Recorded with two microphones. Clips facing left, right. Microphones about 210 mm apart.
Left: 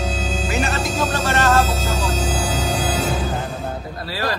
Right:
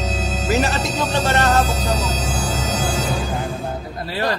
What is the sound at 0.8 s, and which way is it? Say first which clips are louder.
Speech: right 1 dB; 25° right (ahead or behind).